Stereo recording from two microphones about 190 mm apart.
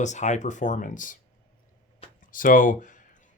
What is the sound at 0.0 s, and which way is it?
Speech, 40° left (ahead or behind).